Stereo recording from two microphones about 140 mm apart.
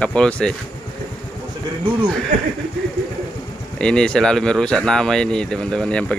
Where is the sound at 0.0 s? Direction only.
10° left (ahead or behind).